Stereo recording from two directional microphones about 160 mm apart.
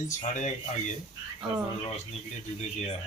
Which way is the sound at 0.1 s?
50° left (ahead or behind).